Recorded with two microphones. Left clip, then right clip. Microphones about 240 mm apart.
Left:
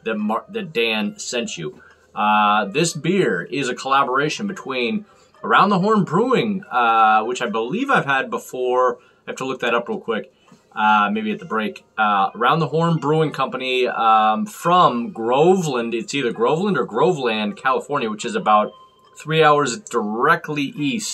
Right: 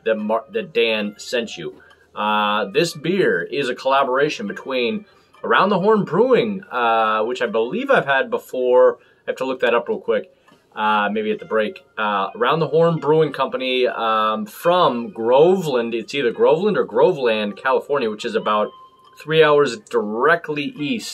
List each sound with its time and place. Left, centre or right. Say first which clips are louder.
0.0 s speech: right 3 dB; centre